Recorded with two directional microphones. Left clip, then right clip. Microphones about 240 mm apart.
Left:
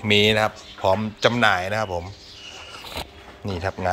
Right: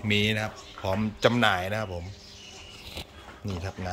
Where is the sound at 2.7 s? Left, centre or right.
Centre.